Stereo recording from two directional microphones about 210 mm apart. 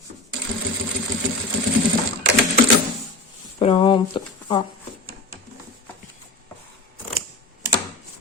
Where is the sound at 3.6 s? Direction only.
25° left (ahead or behind).